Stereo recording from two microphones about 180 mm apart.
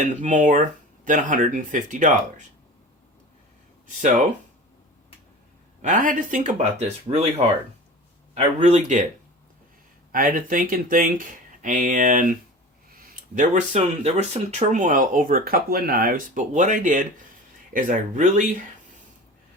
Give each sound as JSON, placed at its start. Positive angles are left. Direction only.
{"t": 0.0, "sound": "speech", "side_deg": -40}
{"t": 5.8, "sound": "speech", "side_deg": -45}
{"t": 8.5, "sound": "speech", "side_deg": -40}
{"t": 10.1, "sound": "speech", "side_deg": -50}